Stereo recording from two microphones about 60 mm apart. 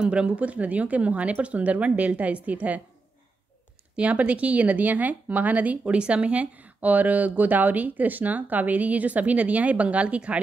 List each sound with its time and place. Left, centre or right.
0.0 s speech: centre
3.9 s speech: right